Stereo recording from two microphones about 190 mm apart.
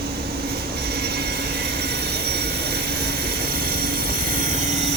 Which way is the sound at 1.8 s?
60° right (ahead or behind).